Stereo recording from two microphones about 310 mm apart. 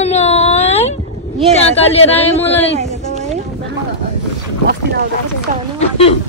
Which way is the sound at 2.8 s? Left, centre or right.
Right.